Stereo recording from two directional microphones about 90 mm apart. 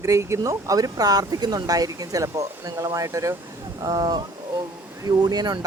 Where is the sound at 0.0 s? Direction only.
35° right (ahead or behind).